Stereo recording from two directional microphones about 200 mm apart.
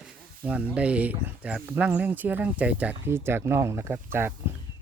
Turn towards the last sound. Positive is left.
turn(degrees=-10)  # may be behind; listen again after turning